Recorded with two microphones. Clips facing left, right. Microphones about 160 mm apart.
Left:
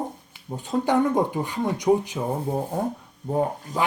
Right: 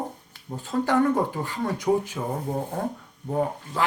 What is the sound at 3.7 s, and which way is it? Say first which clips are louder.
Speech: left 2 dB; 40° left (ahead or behind).